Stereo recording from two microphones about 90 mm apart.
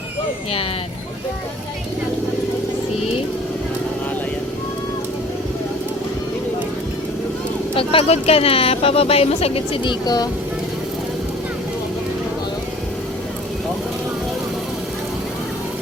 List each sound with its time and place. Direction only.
7.8 s speech: 90° left; by 10.2 s 55° left (ahead or behind)